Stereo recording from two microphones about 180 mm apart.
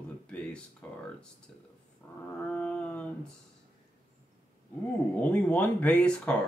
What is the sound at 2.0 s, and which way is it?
Speech, 10° left (ahead or behind).